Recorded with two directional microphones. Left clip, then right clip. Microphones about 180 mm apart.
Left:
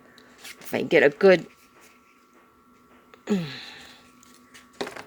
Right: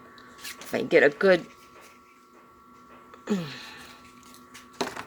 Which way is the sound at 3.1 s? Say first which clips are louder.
Left 3 dB; 30° left (ahead or behind).